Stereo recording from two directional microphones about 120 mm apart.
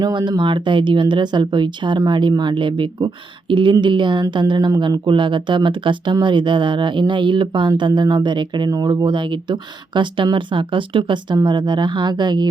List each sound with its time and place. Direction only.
0.0 s speech: 40° right (ahead or behind)